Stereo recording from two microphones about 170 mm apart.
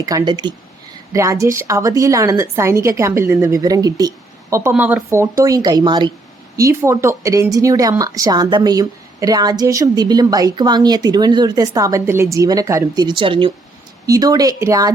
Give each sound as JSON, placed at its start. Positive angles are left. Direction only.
{"t": 0.0, "sound": "speech", "side_deg": -20}
{"t": 4.7, "sound": "speech", "side_deg": -5}
{"t": 5.4, "sound": "speech", "side_deg": -20}